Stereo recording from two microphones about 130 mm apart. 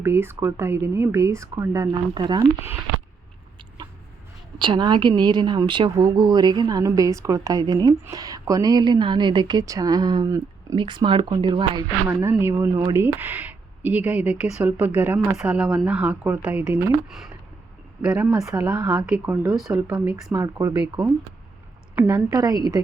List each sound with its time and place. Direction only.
0.0 s speech: 20° right (ahead or behind); by 2.4 s 35° right (ahead or behind)
3.8 s a sound: 35° right (ahead or behind)
4.5 s a woman's voice: 35° right (ahead or behind)
12.0 s speech: 15° right (ahead or behind)
19.5 s speech: centre (ahead or behind)
19.7 s speech: 15° right (ahead or behind)
21.9 s a woman's voice: 15° right (ahead or behind)
22.3 s a woman's voice: 30° right (ahead or behind)